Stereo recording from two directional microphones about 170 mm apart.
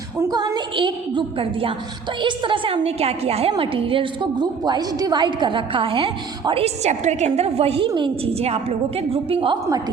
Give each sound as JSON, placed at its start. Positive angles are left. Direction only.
{"t": 0.2, "sound": "a woman's voice", "side_deg": -20}